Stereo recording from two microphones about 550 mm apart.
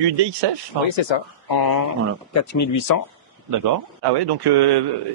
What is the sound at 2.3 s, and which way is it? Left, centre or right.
Speech, left.